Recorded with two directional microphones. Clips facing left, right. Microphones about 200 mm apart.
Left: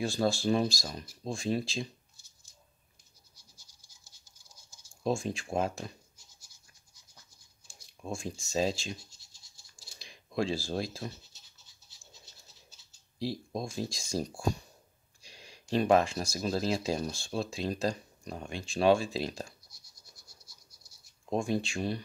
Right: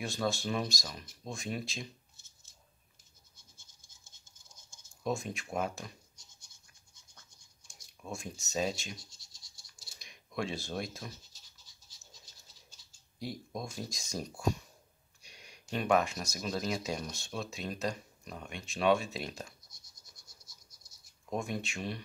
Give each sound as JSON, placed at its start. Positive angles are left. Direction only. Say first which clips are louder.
{"t": 0.0, "sound": "speech", "louder": "left 5 dB", "side_deg": 30}
{"t": 5.0, "sound": "speech", "louder": "left 4 dB", "side_deg": 30}
{"t": 7.6, "sound": "speech", "louder": "left 5 dB", "side_deg": 30}
{"t": 9.8, "sound": "computer keyboard", "louder": "left 4 dB", "side_deg": 30}
{"t": 13.2, "sound": "speech", "louder": "left 5 dB", "side_deg": 30}
{"t": 15.2, "sound": "a sound", "louder": "left 4 dB", "side_deg": 30}
{"t": 15.7, "sound": "speech", "louder": "left 4 dB", "side_deg": 30}
{"t": 20.2, "sound": "a sound", "louder": "left 2 dB", "side_deg": 25}
{"t": 21.3, "sound": "speech", "louder": "left 6 dB", "side_deg": 30}